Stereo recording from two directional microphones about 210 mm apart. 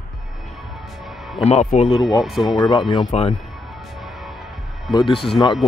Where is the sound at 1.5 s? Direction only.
35° left (ahead or behind).